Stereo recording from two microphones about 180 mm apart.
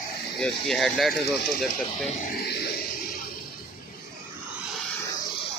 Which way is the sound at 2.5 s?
65° left (ahead or behind).